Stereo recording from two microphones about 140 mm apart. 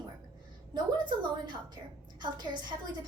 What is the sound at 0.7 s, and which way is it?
A woman's voice, 30° right (ahead or behind).